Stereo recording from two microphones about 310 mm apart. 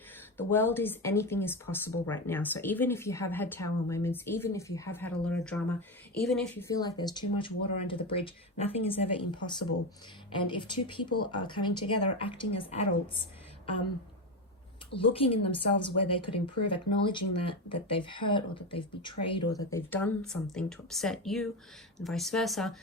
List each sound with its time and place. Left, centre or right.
0.3 s speech: centre
11.1 s speech: left
12.2 s speech: centre
14.9 s speech: centre
15.7 s speech: left
16.7 s speech: centre